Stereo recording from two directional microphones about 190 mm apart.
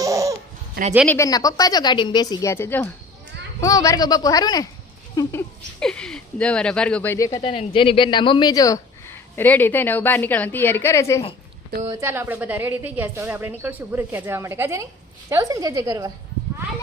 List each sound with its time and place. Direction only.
0.0 s baby laughter: 15° right (ahead or behind)
1.0 s a woman's voice: 15° left (ahead or behind)
7.4 s speech: 30° left (ahead or behind)
11.9 s a woman's voice: 15° right (ahead or behind)